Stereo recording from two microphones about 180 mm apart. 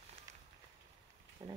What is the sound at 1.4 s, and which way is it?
Speech, 25° right (ahead or behind).